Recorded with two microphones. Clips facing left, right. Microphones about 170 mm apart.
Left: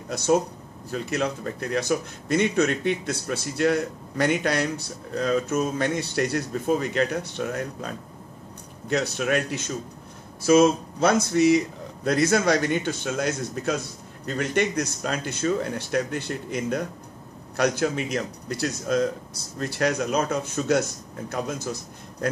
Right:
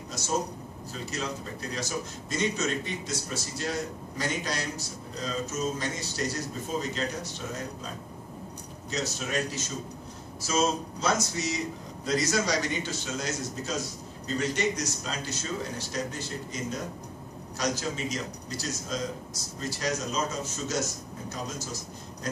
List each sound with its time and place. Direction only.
0.1 s a man's voice: 60° left (ahead or behind)